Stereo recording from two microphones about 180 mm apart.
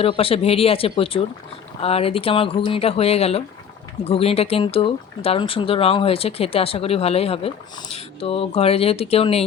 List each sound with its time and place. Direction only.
0.0 s speech: 30° left (ahead or behind)